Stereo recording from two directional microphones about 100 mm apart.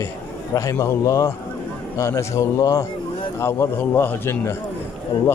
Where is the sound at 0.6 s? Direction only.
30° left (ahead or behind).